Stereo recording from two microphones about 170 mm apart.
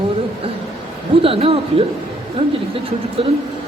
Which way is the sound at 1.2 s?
35° right (ahead or behind).